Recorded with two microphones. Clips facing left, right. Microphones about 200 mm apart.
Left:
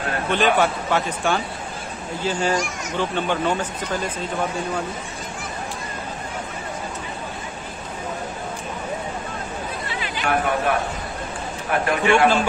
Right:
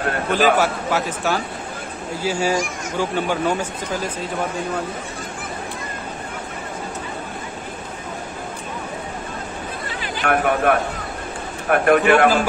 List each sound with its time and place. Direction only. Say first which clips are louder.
0.3 s a man's voice: right 1 dB; 5° right (ahead or behind)
10.2 s a man's voice: right 4 dB; 55° right (ahead or behind)